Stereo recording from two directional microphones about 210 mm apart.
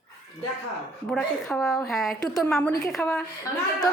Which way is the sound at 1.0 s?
Centre (ahead or behind).